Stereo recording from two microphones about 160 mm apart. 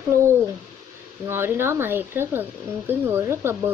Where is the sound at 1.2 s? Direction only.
15° right (ahead or behind).